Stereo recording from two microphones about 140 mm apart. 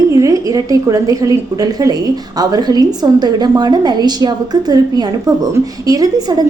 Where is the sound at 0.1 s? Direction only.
25° right (ahead or behind).